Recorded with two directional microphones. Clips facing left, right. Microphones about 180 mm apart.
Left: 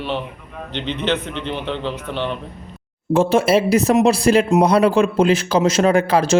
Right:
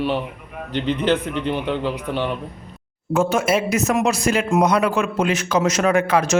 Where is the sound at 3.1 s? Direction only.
30° left (ahead or behind).